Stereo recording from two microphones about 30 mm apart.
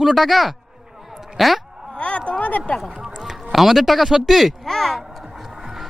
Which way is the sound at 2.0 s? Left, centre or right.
Left.